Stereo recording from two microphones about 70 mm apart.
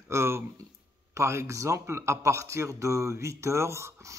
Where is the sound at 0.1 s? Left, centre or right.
Right.